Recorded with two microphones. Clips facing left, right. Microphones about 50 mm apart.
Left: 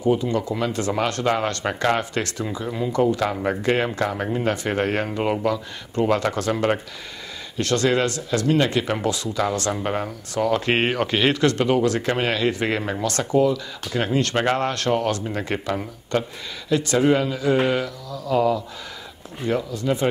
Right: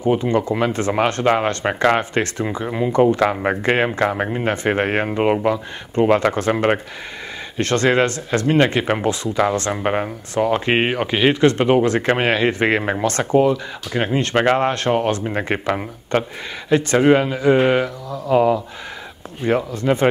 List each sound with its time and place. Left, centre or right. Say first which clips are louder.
0.0 s speech: right 3 dB; right; by 11.5 s centre
11.5 s speech: right 4 dB; right